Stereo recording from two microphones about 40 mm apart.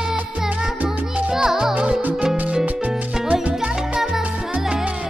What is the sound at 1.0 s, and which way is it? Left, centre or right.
Music, right.